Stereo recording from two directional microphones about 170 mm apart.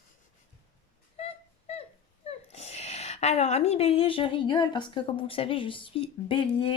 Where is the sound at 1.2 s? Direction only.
40° left (ahead or behind).